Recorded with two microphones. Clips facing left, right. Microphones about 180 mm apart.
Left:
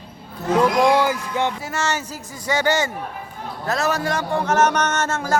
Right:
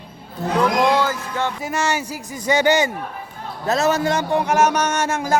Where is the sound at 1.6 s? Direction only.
15° right (ahead or behind).